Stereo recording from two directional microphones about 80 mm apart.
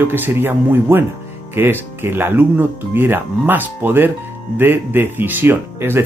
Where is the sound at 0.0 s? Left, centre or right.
Right.